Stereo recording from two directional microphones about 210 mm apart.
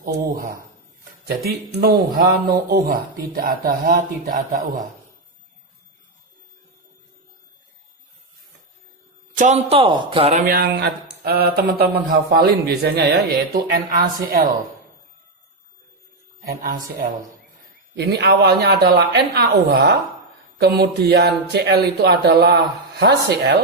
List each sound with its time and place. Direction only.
0.0 s a man's voice: 40° right (ahead or behind)
9.3 s a man's voice: 35° right (ahead or behind)
16.4 s speech: 45° right (ahead or behind)
17.9 s a man's voice: 55° right (ahead or behind)